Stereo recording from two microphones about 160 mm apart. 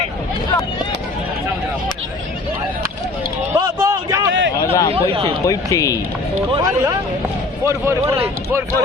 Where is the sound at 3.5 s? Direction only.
20° right (ahead or behind).